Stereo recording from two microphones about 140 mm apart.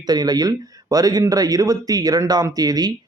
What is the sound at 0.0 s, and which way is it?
Speech, 30° right (ahead or behind).